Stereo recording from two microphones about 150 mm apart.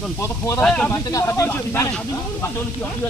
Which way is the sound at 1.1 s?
20° left (ahead or behind).